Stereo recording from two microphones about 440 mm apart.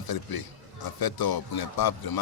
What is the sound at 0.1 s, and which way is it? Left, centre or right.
Speech, left.